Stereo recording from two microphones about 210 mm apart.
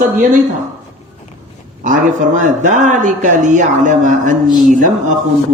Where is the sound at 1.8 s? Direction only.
35° right (ahead or behind).